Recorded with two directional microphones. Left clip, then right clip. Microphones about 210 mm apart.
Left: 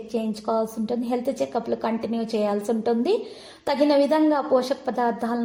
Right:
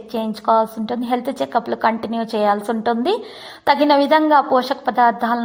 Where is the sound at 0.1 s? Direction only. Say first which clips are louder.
Right 8 dB; 20° right (ahead or behind).